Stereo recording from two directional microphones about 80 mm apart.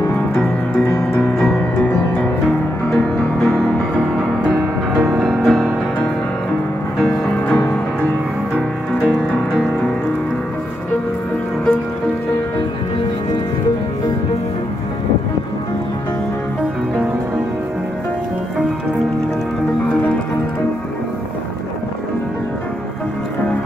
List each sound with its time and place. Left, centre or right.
1.8 s music: left
2.4 s music: centre
4.9 s music: centre
8.5 s music: centre